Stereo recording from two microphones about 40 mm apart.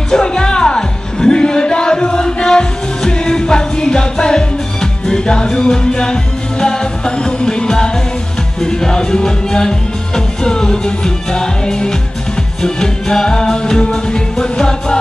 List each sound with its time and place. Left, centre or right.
0.1 s music: centre